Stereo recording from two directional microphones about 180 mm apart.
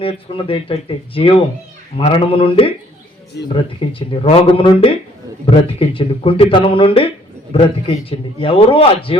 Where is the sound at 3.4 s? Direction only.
70° left (ahead or behind).